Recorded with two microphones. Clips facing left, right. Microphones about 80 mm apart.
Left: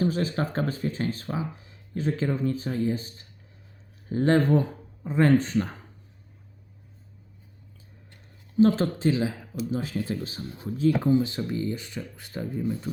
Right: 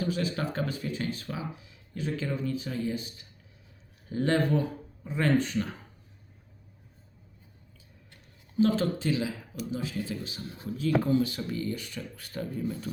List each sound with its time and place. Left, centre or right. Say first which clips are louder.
0.0 s speech: left 4 dB; left
8.5 s speech: left 4 dB; left